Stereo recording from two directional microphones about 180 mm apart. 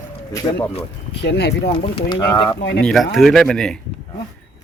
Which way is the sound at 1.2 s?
70° left (ahead or behind).